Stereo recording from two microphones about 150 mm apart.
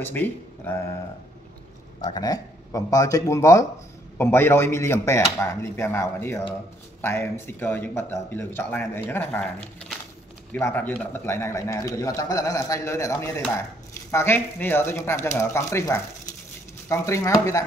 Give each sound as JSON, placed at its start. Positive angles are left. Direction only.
{"t": 0.0, "sound": "speech", "side_deg": 15}
{"t": 2.0, "sound": "a man's voice", "side_deg": 25}